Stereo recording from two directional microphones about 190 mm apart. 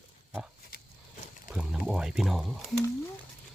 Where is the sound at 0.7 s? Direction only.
50° left (ahead or behind).